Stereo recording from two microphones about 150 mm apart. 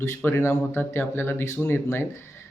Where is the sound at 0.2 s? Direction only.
15° left (ahead or behind).